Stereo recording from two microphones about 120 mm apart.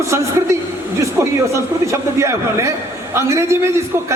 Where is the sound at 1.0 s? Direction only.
25° right (ahead or behind).